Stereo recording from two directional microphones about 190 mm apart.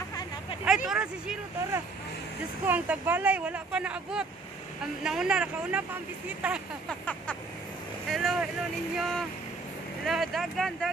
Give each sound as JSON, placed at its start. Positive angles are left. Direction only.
{"t": 0.8, "sound": "speech", "side_deg": -5}
{"t": 6.9, "sound": "speech", "side_deg": 5}